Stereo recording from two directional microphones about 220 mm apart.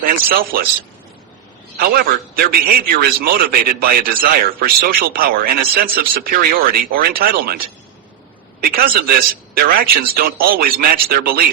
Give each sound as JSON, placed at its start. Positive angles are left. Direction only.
{"t": 0.5, "sound": "a man's voice", "side_deg": -40}
{"t": 1.8, "sound": "a man's voice", "side_deg": -45}
{"t": 8.6, "sound": "a man's voice", "side_deg": -45}